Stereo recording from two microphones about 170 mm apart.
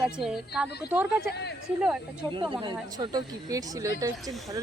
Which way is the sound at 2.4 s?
25° right (ahead or behind).